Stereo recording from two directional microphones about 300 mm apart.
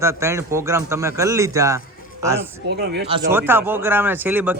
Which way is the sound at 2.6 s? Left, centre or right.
Right.